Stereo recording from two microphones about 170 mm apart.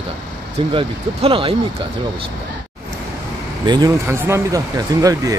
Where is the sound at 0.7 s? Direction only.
30° right (ahead or behind).